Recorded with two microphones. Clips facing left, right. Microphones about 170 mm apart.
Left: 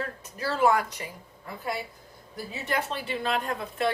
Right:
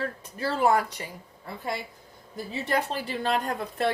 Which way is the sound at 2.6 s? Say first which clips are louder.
Right 2 dB; 35° right (ahead or behind).